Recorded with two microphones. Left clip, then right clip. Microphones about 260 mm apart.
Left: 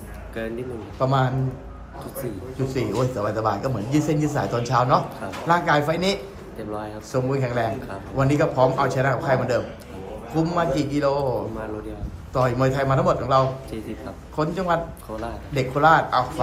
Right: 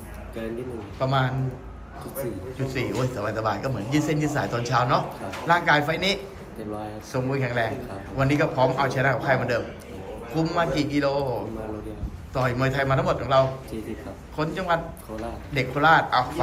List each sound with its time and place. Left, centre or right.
0.9 s a man's voice: centre
2.6 s a man's voice: centre